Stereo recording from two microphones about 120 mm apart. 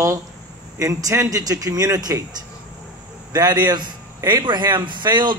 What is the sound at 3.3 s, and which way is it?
A man's voice, 35° right (ahead or behind).